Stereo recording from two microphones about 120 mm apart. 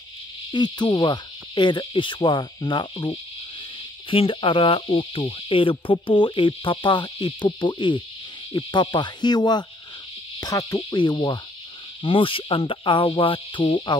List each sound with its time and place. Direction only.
0.5 s insect: 40° left (ahead or behind)
10.8 s insect: 40° left (ahead or behind)